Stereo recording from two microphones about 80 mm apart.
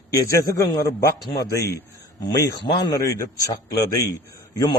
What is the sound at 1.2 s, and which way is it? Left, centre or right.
Speech, left.